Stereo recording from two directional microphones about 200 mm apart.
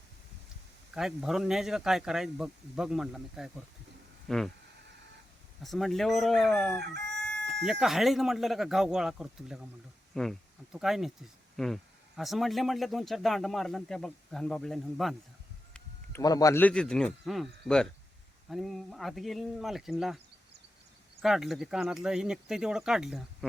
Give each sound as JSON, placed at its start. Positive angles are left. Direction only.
{"t": 0.9, "sound": "speech", "side_deg": 0}
{"t": 5.6, "sound": "speech", "side_deg": 0}
{"t": 7.1, "sound": "chicken", "side_deg": 5}
{"t": 7.6, "sound": "speech", "side_deg": 0}
{"t": 15.7, "sound": "a man's voice", "side_deg": 15}
{"t": 21.2, "sound": "speech", "side_deg": 0}